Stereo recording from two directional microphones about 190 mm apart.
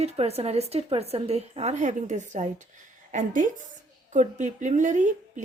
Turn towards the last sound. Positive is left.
turn(degrees=-40)  # may be behind; listen again after turning